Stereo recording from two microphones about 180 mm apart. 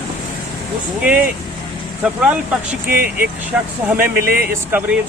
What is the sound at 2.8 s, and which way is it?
Speech, 50° right (ahead or behind).